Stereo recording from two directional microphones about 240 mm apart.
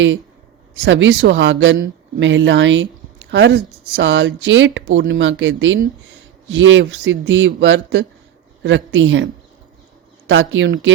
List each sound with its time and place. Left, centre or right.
0.9 s speech: right